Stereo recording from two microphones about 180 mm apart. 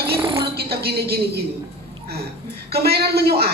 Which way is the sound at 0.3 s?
30° right (ahead or behind).